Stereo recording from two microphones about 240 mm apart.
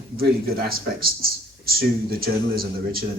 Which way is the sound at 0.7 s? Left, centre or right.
Right.